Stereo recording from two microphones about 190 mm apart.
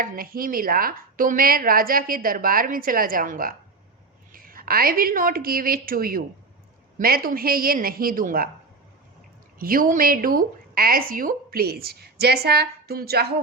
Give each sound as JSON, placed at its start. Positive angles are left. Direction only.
{"t": 0.0, "sound": "a woman's voice", "side_deg": -50}
{"t": 9.6, "sound": "a woman's voice", "side_deg": -50}